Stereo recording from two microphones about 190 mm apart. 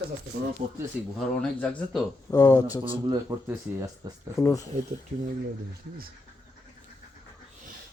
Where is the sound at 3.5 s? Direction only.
20° right (ahead or behind).